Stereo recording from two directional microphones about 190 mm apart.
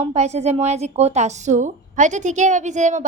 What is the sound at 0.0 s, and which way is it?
Speech, 35° right (ahead or behind).